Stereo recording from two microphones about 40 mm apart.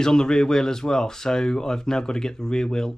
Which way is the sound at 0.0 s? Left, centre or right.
Centre.